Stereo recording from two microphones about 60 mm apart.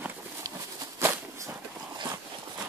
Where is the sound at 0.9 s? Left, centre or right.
Right.